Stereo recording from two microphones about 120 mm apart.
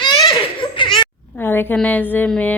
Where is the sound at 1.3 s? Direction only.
15° left (ahead or behind).